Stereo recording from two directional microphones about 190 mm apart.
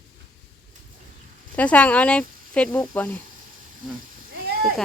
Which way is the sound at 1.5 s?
5° left (ahead or behind).